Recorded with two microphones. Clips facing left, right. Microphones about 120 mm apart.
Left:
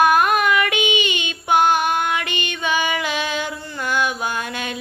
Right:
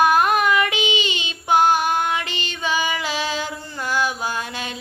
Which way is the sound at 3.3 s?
60° left (ahead or behind).